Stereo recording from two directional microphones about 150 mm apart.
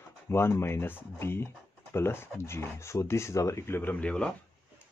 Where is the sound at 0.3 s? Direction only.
15° left (ahead or behind).